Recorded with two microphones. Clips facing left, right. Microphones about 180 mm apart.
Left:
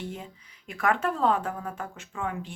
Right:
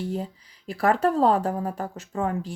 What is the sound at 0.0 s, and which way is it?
Speech, 35° right (ahead or behind).